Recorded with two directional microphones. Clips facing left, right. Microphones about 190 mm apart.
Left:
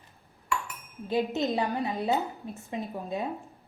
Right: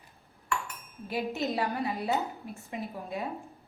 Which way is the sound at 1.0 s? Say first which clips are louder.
Left 4 dB; 20° left (ahead or behind).